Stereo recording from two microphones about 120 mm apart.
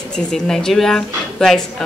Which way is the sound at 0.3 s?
5° left (ahead or behind).